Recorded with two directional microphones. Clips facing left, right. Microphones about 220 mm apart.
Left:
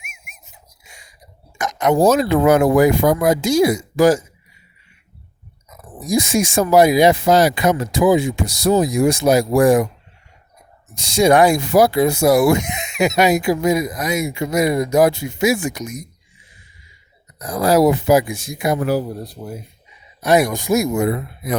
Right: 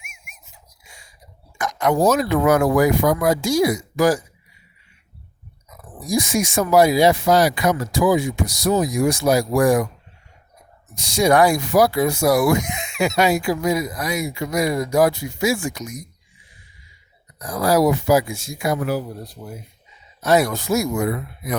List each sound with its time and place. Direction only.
0.0 s rub: 20° left (ahead or behind)
0.9 s a sound: 20° left (ahead or behind)
1.5 s speech: 20° left (ahead or behind)
5.7 s speech: 20° left (ahead or behind)
10.9 s speech: 25° left (ahead or behind)
17.4 s speech: 25° left (ahead or behind)
18.8 s speech: 35° left (ahead or behind)
20.2 s speech: 15° left (ahead or behind)